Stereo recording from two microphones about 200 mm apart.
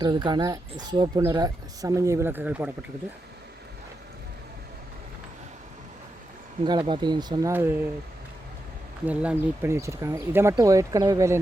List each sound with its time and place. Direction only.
0.0 s speech: 20° right (ahead or behind)
6.7 s speech: 25° right (ahead or behind)
9.0 s speech: 10° right (ahead or behind)